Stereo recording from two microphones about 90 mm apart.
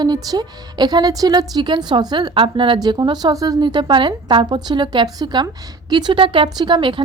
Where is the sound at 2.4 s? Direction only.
70° right (ahead or behind).